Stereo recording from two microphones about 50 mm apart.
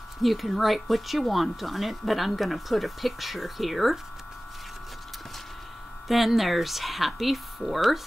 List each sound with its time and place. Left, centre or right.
0.2 s speech: centre
6.0 s speech: centre